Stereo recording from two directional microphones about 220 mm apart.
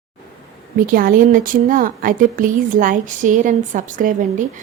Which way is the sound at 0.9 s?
40° right (ahead or behind).